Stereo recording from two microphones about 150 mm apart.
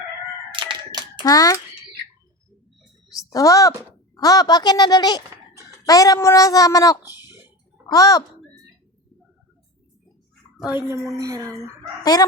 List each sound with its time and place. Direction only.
0.5 s crowing: 30° right (ahead or behind)
1.2 s speech: 25° left (ahead or behind)
3.3 s speech: 20° left (ahead or behind)
10.8 s speech: 20° right (ahead or behind)
12.1 s speech: 25° left (ahead or behind)